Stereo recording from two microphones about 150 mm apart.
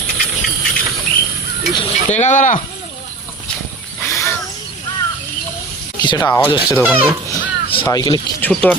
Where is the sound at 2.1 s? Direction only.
50° left (ahead or behind).